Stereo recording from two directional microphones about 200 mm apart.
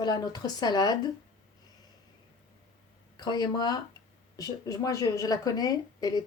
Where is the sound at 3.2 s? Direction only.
20° left (ahead or behind).